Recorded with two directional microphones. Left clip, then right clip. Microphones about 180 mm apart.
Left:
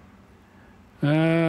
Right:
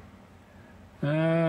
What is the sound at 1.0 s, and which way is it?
Speech, 45° left (ahead or behind).